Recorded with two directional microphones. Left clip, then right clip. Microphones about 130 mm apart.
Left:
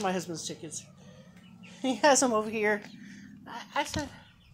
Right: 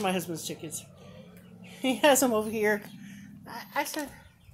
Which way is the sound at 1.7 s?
15° left (ahead or behind).